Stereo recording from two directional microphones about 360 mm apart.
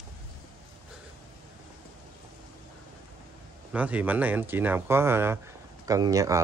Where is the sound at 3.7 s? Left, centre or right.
Centre.